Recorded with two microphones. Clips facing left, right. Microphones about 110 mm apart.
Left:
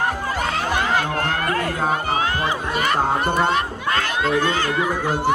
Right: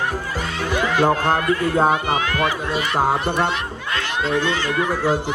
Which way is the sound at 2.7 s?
50° left (ahead or behind).